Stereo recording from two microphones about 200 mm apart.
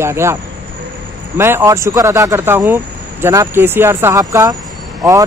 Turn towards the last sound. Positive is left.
turn(degrees=-15)  # may be behind; listen again after turning